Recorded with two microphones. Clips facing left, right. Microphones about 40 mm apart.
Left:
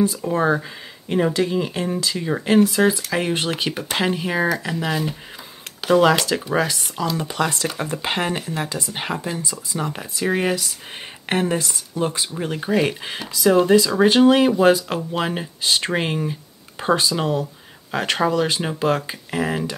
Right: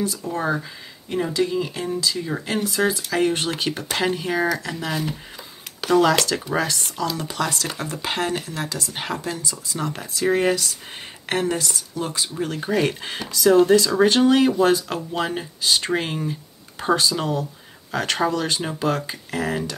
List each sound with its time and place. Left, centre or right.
0.0 s speech: left
1.0 s speech: left
2.2 s speech: left
3.1 s speech: centre
7.2 s speech: left
11.2 s speech: left
12.6 s speech: centre